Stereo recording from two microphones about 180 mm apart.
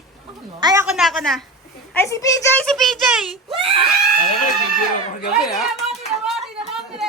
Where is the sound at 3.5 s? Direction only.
30° right (ahead or behind).